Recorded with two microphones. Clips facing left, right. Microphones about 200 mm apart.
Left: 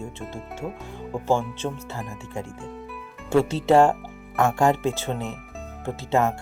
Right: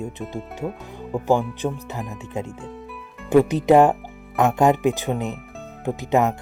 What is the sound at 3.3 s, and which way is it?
Speech, 15° right (ahead or behind).